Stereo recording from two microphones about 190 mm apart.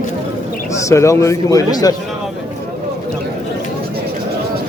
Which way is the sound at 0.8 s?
15° left (ahead or behind).